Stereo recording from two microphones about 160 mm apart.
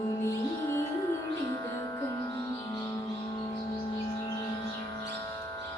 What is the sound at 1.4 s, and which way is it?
Music, 20° left (ahead or behind).